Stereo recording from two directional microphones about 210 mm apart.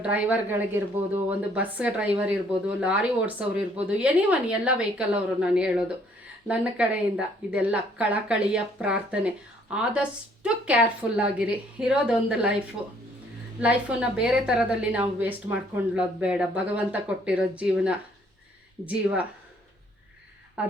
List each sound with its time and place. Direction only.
0.0 s speech: 5° right (ahead or behind)
13.6 s speech: 5° right (ahead or behind)
20.6 s speech: 5° right (ahead or behind)